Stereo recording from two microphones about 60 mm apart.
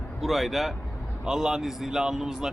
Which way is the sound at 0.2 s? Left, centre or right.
Centre.